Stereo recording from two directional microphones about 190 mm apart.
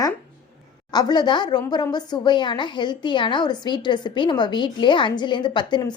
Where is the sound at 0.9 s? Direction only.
20° left (ahead or behind).